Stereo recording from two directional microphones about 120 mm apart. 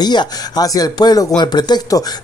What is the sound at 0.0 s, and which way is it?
Speech, 35° left (ahead or behind).